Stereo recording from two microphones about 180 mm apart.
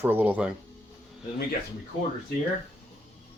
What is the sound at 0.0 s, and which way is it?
Speech, 10° right (ahead or behind).